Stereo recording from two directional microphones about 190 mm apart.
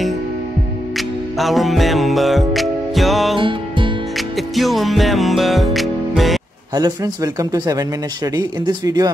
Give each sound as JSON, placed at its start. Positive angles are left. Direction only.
{"t": 0.9, "sound": "music", "side_deg": 0}
{"t": 3.3, "sound": "music", "side_deg": -25}
{"t": 4.4, "sound": "music", "side_deg": 0}
{"t": 6.7, "sound": "speech", "side_deg": -20}